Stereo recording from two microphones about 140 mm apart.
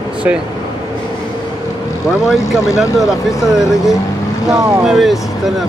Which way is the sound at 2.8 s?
5° right (ahead or behind).